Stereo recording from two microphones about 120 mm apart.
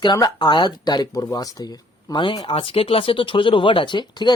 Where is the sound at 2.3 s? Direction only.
50° left (ahead or behind).